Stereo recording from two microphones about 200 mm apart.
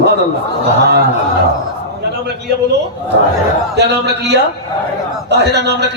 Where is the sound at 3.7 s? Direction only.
60° right (ahead or behind).